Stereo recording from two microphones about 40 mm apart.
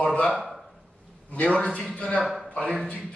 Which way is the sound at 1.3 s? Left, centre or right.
Left.